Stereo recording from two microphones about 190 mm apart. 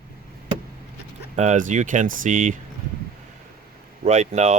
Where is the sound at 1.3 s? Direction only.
40° right (ahead or behind).